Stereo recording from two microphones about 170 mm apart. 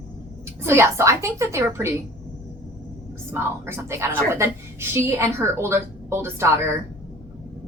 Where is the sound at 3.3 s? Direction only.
15° right (ahead or behind).